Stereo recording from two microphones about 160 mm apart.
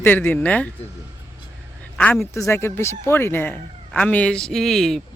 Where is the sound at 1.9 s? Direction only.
10° left (ahead or behind).